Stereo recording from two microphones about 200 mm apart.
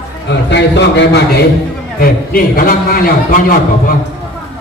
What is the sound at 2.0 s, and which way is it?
A man's voice, 50° left (ahead or behind).